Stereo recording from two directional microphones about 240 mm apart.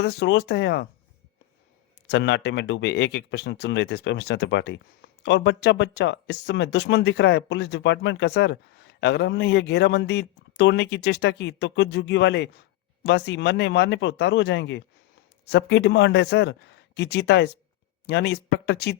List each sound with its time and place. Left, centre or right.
0.0 s speech: left
2.0 s speech: left